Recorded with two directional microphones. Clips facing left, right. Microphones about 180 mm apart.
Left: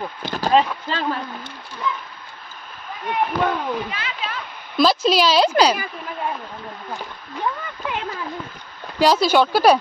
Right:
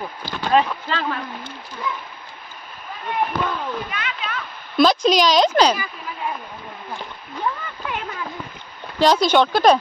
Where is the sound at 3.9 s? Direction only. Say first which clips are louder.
Even; 30° left (ahead or behind).